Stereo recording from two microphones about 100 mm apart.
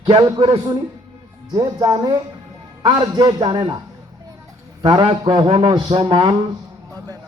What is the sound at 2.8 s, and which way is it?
Speech, 50° right (ahead or behind).